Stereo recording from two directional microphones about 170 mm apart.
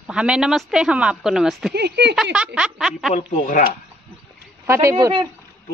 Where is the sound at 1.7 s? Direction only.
80° right.